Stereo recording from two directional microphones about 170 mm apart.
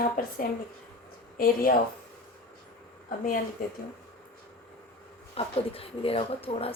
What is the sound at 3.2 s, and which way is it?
Speech, 55° left (ahead or behind).